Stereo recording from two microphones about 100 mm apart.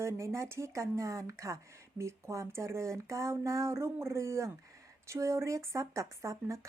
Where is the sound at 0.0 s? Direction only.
30° right (ahead or behind).